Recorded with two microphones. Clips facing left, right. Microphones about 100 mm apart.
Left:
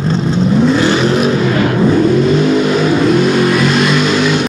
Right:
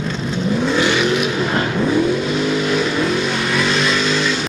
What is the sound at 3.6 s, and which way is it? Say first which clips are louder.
Vehicle: left 6 dB; 5° left (ahead or behind).